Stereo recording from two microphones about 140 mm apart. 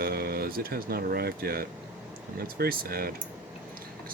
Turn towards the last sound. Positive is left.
turn(degrees=-90)